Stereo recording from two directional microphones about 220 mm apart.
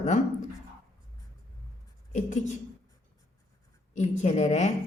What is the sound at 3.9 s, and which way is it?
Speech, 30° left (ahead or behind).